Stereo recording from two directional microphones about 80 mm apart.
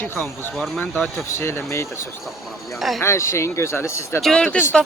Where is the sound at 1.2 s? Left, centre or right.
Left.